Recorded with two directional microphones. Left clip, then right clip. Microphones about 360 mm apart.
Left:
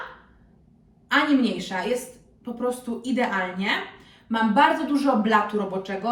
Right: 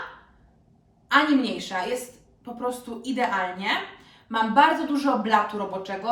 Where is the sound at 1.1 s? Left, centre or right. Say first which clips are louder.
Even; centre.